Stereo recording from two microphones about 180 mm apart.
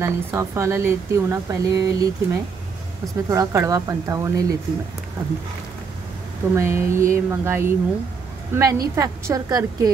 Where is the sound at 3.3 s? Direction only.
15° right (ahead or behind).